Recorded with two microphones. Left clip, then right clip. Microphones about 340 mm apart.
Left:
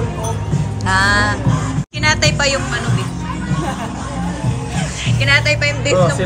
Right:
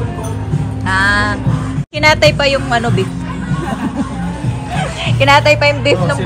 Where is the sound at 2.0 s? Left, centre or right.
Centre.